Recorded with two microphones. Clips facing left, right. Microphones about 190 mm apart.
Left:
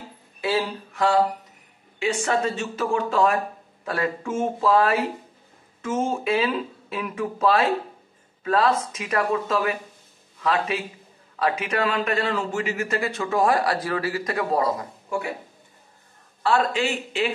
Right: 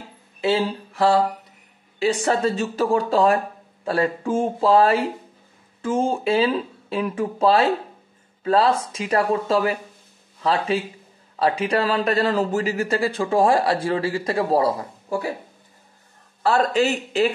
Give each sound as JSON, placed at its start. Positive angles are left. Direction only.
{"t": 0.4, "sound": "a sound", "side_deg": -25}
{"t": 2.0, "sound": "speech", "side_deg": -35}
{"t": 16.4, "sound": "speech", "side_deg": -40}